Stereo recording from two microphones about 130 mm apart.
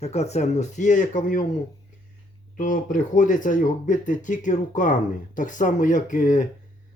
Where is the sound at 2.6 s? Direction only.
90° left.